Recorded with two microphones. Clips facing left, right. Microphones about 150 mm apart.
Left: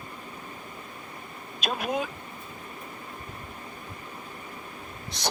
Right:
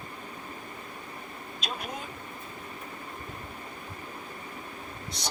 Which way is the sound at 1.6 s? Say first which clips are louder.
Left 9 dB; 90° left.